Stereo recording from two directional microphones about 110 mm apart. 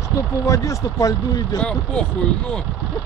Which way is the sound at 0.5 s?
30° left (ahead or behind).